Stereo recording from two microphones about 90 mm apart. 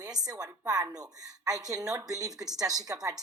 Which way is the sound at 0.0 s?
45° right (ahead or behind).